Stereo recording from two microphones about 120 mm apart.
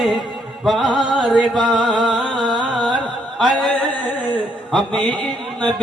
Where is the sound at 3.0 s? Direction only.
5° left (ahead or behind).